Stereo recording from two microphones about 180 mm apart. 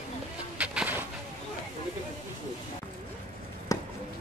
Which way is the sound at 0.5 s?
5° right (ahead or behind).